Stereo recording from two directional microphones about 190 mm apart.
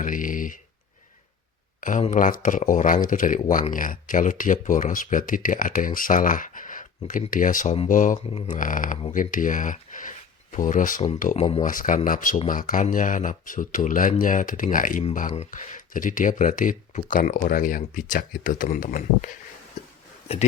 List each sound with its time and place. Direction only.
0.0 s a sound: 45° left (ahead or behind)
1.8 s speech: 40° left (ahead or behind)
8.3 s speech: 30° left (ahead or behind)
8.5 s speech: 45° left (ahead or behind)